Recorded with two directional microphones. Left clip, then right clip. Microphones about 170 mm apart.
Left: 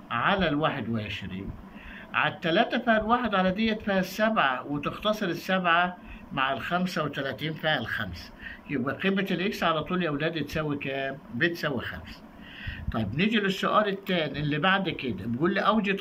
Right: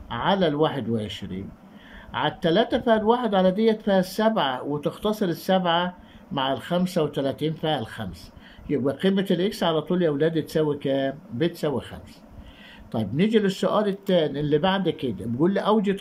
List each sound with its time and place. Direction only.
0.1 s speech: 50° right (ahead or behind)